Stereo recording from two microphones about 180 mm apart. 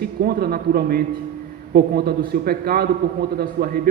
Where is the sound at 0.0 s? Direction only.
60° right (ahead or behind).